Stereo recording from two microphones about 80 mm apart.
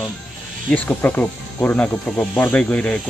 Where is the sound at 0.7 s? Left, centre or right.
Centre.